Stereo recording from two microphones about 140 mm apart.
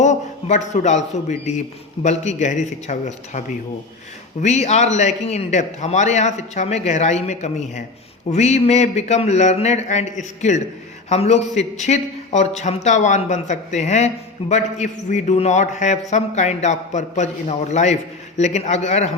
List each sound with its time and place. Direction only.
0.0 s a man's voice: 55° left (ahead or behind)